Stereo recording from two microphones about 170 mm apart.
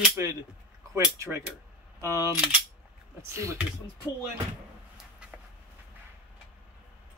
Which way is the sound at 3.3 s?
15° right (ahead or behind).